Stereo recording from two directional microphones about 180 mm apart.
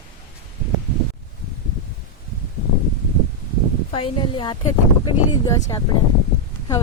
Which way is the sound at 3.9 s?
30° left (ahead or behind).